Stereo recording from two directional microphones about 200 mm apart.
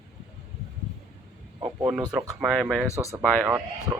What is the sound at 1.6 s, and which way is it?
Speech, 15° right (ahead or behind).